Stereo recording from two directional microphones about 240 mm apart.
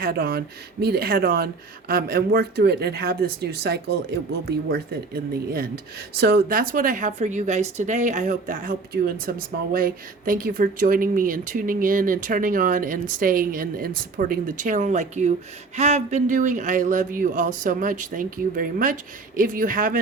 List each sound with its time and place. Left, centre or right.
0.0 s speech: right